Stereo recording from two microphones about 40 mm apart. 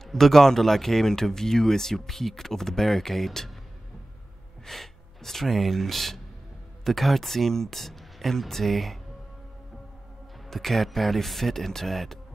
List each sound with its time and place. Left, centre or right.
0.0 s speech: centre
4.6 s speech: centre
10.5 s speech: centre